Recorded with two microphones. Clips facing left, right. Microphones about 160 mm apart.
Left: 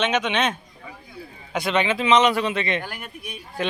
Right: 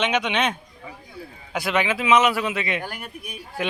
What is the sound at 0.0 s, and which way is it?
Speech, 10° right (ahead or behind).